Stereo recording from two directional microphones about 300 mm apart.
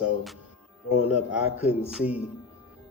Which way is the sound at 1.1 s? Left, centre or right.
Centre.